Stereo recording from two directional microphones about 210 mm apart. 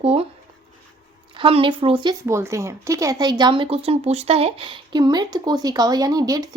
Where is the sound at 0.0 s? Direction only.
25° right (ahead or behind).